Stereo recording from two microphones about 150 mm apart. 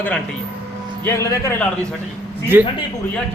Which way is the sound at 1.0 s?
20° left (ahead or behind).